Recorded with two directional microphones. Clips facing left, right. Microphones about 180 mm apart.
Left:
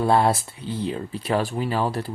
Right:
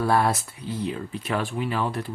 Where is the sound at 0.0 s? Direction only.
25° left (ahead or behind).